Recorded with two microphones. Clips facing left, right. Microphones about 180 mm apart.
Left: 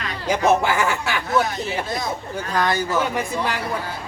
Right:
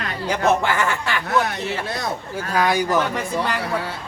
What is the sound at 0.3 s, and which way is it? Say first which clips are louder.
Speech: left 1 dB; 10° left (ahead or behind).